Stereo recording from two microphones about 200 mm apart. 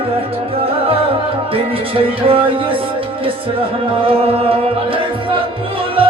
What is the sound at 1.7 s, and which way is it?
Speech, 25° right (ahead or behind).